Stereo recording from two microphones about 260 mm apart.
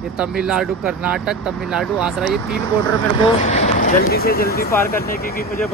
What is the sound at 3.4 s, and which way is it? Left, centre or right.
Speech, left.